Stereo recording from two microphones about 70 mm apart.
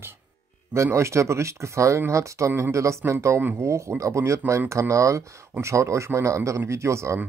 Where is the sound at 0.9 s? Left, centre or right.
Right.